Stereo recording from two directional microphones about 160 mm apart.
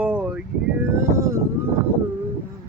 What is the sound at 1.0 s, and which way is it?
Speech, 20° right (ahead or behind).